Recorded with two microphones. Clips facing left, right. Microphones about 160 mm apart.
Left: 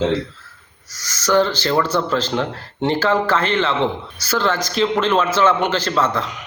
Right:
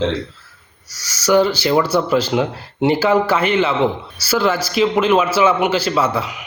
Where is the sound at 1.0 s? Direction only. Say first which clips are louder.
Right 2 dB; 10° right (ahead or behind).